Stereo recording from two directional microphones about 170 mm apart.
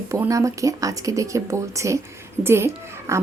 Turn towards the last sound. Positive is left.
turn(degrees=-15)  # may be behind; listen again after turning